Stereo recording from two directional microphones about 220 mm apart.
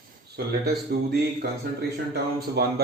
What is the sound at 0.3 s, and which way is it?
Speech, 45° right (ahead or behind).